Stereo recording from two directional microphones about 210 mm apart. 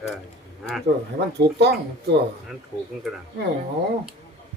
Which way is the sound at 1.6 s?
55° right (ahead or behind).